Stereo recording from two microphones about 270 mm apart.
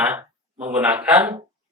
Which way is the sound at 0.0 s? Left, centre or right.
Centre.